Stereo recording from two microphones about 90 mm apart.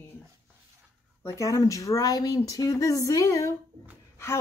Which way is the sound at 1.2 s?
35° left (ahead or behind).